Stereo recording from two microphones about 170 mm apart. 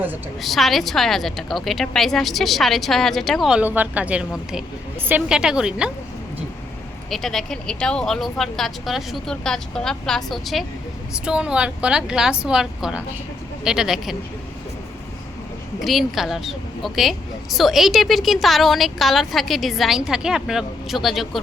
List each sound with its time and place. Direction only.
0.4 s a woman's voice: centre (ahead or behind)
7.1 s a woman's voice: centre (ahead or behind)
15.8 s a woman's voice: centre (ahead or behind)